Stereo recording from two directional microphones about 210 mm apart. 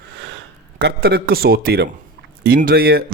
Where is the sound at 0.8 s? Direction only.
50° right (ahead or behind).